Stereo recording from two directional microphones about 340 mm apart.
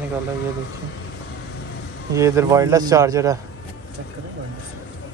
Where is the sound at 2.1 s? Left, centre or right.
Centre.